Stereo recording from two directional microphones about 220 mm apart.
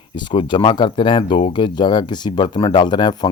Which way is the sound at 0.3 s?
20° left (ahead or behind).